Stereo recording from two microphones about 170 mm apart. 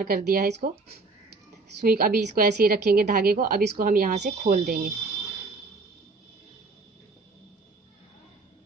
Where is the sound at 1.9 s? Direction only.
60° right (ahead or behind).